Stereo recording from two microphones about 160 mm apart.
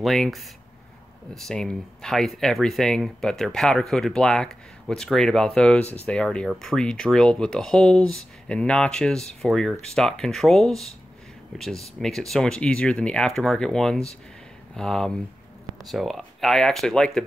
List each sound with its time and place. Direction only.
0.0 s speech: centre (ahead or behind)